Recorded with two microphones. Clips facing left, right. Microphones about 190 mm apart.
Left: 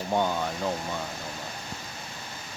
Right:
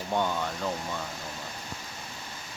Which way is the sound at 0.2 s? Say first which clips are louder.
Left 1 dB; 10° left (ahead or behind).